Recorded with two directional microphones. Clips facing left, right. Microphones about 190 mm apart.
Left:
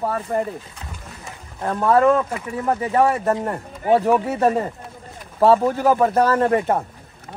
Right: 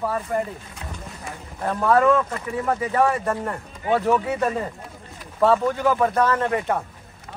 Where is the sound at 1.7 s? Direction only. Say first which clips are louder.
Left 2 dB; 30° left (ahead or behind).